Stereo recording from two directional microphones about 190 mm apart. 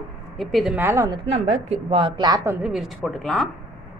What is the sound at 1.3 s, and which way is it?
A woman's voice, 30° right (ahead or behind).